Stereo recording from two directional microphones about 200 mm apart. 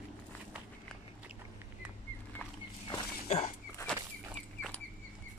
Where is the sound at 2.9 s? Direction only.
30° left (ahead or behind).